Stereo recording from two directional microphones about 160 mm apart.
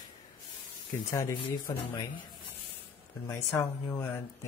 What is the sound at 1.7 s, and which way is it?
Speech, 20° left (ahead or behind).